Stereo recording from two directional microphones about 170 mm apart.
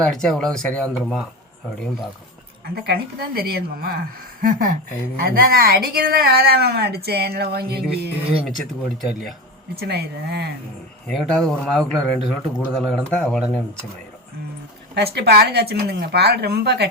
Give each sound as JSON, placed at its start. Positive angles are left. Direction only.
{"t": 0.0, "sound": "speech", "side_deg": 5}
{"t": 2.8, "sound": "a woman's voice", "side_deg": -65}
{"t": 8.4, "sound": "speech", "side_deg": 0}
{"t": 9.8, "sound": "speech", "side_deg": -70}
{"t": 11.1, "sound": "speech", "side_deg": 5}
{"t": 14.9, "sound": "speech", "side_deg": -75}